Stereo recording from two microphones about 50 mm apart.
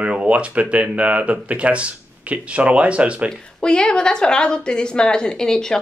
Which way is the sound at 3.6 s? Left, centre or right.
Centre.